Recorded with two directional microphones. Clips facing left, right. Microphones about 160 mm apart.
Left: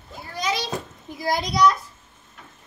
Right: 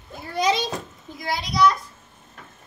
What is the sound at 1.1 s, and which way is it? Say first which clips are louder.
Speech: left 4 dB; 40° left (ahead or behind).